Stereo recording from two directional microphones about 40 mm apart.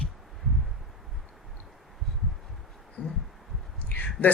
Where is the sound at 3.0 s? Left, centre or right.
Left.